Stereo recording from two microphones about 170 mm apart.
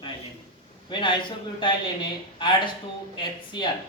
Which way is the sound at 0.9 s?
30° left (ahead or behind).